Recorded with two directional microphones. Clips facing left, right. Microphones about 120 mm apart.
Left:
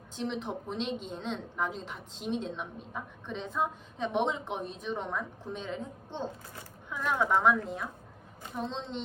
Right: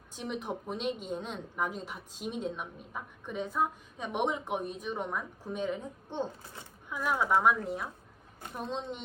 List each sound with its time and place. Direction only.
0.2 s a woman's voice: 10° right (ahead or behind)
8.7 s a woman's voice: 15° right (ahead or behind)